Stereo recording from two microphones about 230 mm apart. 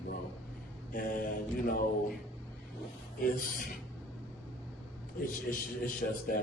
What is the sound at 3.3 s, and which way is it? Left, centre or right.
Speech, left.